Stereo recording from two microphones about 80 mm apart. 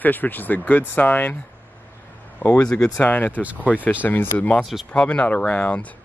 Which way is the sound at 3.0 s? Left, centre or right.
Left.